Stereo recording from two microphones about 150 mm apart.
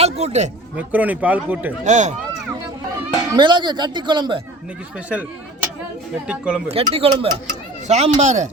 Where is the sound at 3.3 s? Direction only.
30° right (ahead or behind).